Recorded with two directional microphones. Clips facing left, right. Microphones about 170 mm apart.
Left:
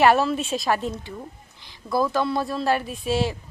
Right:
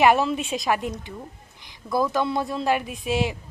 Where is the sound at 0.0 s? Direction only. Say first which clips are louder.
Left 1 dB; 15° right (ahead or behind).